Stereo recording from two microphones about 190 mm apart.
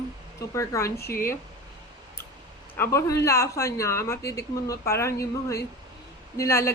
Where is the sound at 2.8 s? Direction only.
15° left (ahead or behind).